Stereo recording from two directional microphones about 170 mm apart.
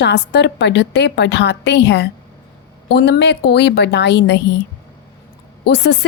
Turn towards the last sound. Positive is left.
turn(degrees=90)